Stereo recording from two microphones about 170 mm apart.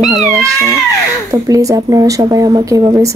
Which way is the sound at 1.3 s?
20° right (ahead or behind).